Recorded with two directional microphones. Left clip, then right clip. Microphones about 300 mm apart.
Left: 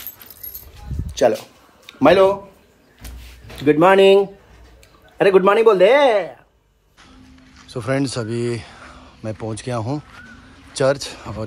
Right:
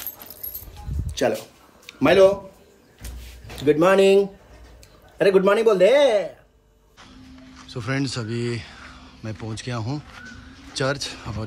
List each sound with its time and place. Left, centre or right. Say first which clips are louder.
1.0 s a sound: left 6 dB; centre
1.9 s a man's voice: left 2 dB; centre
3.6 s a man's voice: left 4 dB; centre
7.7 s a man's voice: left 5 dB; centre